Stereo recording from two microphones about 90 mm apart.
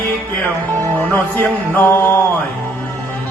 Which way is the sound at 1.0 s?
20° left (ahead or behind).